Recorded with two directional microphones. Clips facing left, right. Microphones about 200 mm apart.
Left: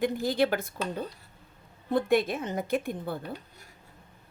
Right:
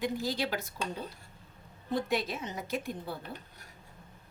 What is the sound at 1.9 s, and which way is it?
Speech, 55° left (ahead or behind).